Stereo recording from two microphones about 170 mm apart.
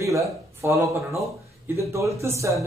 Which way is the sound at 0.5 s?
15° right (ahead or behind).